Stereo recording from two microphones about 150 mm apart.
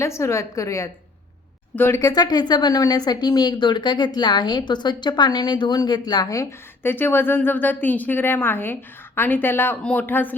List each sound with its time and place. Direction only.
0.0 s speech: 20° left (ahead or behind)